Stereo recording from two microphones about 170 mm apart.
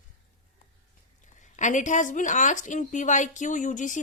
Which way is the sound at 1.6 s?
45° left (ahead or behind).